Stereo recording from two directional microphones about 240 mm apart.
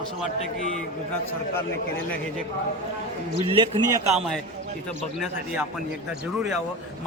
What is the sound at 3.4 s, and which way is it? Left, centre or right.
Speech, right.